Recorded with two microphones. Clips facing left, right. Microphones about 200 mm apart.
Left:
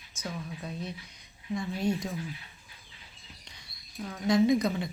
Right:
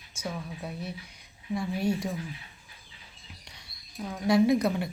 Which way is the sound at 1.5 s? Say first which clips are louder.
Right 1 dB; 10° right (ahead or behind).